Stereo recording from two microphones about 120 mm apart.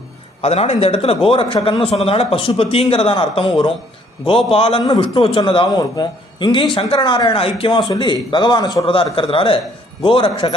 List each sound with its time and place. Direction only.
0.4 s speech: 60° left (ahead or behind)